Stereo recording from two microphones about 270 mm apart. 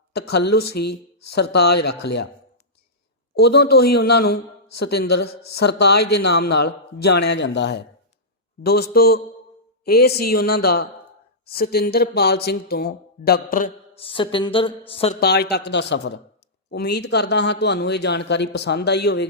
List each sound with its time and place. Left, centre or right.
0.1 s speech: left
3.6 s speech: left
15.2 s speech: left